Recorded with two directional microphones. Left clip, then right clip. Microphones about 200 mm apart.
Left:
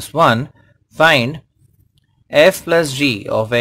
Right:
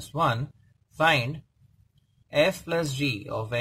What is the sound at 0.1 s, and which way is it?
Speech, 30° left (ahead or behind).